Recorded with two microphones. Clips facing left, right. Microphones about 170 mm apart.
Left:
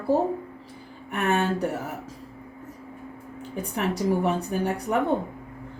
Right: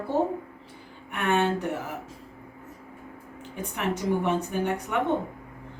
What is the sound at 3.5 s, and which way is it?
Speech, 35° left (ahead or behind).